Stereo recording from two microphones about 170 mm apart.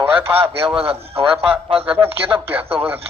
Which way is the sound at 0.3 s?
35° right (ahead or behind).